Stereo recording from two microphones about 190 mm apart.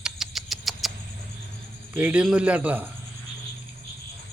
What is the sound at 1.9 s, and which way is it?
Speech, 10° right (ahead or behind).